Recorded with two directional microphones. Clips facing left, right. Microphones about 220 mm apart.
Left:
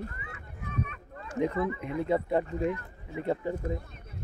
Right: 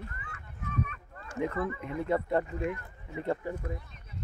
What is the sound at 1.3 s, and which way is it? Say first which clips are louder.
Speech: left 3 dB; 20° left (ahead or behind).